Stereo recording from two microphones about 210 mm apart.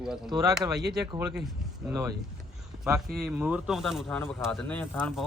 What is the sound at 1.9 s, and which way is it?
Speech, 15° right (ahead or behind).